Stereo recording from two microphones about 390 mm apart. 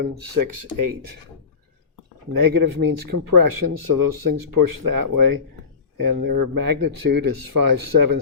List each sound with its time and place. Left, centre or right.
0.0 s speech: right
2.3 s speech: right